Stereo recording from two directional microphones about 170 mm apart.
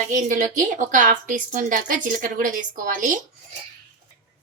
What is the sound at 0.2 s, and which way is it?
A woman's voice, 50° right (ahead or behind).